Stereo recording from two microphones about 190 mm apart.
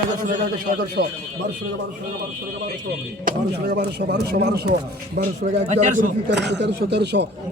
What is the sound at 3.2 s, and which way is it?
Speech, 45° right (ahead or behind).